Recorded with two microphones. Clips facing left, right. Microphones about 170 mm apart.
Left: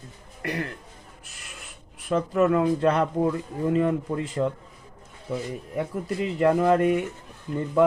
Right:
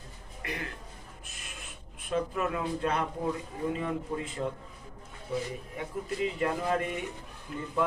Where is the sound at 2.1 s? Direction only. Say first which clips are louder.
Left 9 dB; 55° left (ahead or behind).